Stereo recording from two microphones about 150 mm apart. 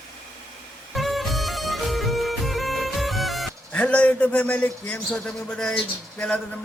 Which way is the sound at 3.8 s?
10° left (ahead or behind).